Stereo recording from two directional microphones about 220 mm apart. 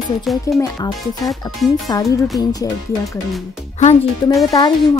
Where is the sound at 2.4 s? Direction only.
15° left (ahead or behind).